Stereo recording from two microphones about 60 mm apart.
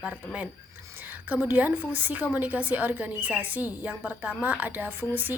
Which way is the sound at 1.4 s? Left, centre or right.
Right.